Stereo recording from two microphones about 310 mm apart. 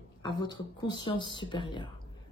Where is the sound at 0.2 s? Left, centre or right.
Centre.